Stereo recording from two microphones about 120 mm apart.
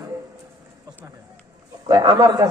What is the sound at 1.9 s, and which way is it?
Speech, 35° right (ahead or behind).